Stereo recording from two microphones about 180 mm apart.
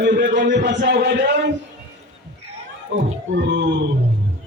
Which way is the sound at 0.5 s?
75° right (ahead or behind).